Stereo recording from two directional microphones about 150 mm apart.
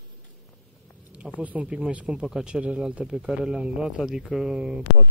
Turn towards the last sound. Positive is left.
turn(degrees=-5)  # may be behind; listen again after turning